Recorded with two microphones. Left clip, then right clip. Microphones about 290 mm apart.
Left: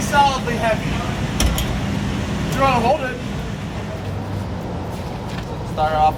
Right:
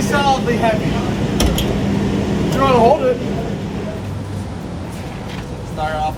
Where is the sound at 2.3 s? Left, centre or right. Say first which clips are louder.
Right 3 dB; centre.